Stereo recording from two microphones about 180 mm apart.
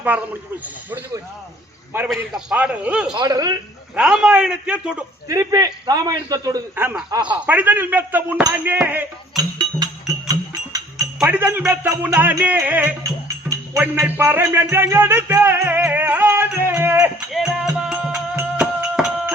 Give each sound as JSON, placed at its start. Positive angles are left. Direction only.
{"t": 0.1, "sound": "music", "side_deg": -10}
{"t": 2.0, "sound": "a man's voice", "side_deg": -5}
{"t": 3.2, "sound": "a man's voice", "side_deg": -20}
{"t": 3.9, "sound": "a man's voice", "side_deg": -5}
{"t": 5.3, "sound": "a man's voice", "side_deg": -20}
{"t": 7.3, "sound": "music", "side_deg": -10}
{"t": 9.3, "sound": "music", "side_deg": -20}
{"t": 17.3, "sound": "a man's voice", "side_deg": -5}
{"t": 17.7, "sound": "music", "side_deg": -5}